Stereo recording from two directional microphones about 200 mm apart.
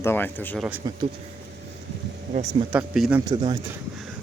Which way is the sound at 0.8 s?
20° right (ahead or behind).